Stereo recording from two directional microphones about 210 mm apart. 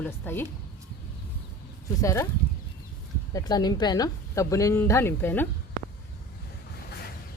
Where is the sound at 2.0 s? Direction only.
15° left (ahead or behind).